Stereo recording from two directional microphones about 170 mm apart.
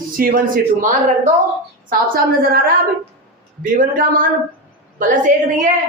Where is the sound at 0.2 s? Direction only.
55° right (ahead or behind).